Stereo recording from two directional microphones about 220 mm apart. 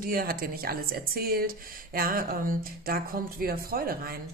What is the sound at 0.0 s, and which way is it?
Speech, 40° right (ahead or behind).